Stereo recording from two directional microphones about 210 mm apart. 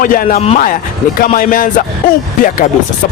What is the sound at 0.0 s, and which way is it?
Speech, 40° left (ahead or behind).